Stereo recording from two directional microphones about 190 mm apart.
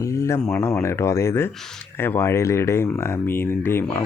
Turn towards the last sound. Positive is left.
turn(degrees=10)  # may be behind; listen again after turning